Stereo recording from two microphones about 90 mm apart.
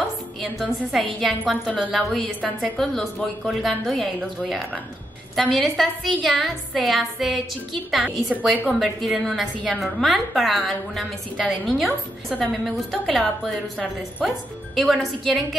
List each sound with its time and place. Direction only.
0.4 s a woman's voice: centre (ahead or behind)
8.0 s a woman's voice: 15° right (ahead or behind)
8.7 s a woman's voice: centre (ahead or behind)